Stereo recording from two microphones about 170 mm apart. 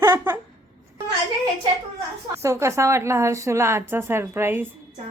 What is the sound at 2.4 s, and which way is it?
A woman's voice, 15° right (ahead or behind).